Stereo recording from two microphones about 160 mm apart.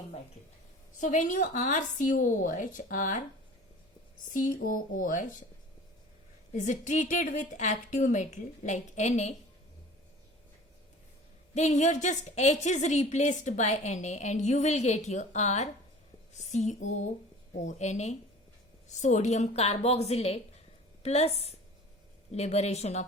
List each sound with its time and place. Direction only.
0.9 s a woman's voice: 50° left (ahead or behind)
4.3 s speech: 55° left (ahead or behind)
6.5 s a woman's voice: 50° left (ahead or behind)
11.5 s a woman's voice: 50° left (ahead or behind)